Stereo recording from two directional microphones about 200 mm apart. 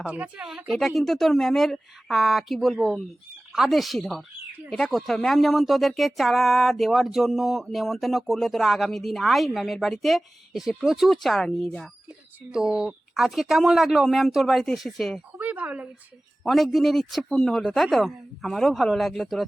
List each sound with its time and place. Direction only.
0.0 s speech: 5° right (ahead or behind)